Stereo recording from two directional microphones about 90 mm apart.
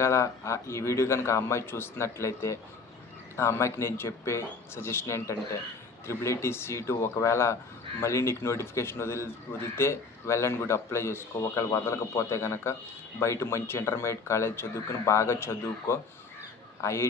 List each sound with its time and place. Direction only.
0.0 s speech: 30° left (ahead or behind)